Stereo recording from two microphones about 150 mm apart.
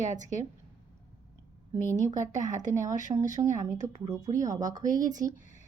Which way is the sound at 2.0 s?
25° right (ahead or behind).